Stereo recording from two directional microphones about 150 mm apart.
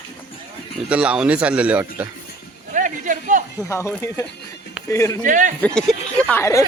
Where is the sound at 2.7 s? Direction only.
60° right (ahead or behind).